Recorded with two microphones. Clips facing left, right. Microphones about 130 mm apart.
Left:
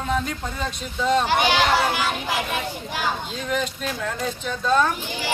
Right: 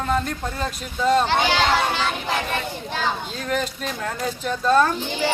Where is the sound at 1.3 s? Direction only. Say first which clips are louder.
Even; 15° left (ahead or behind).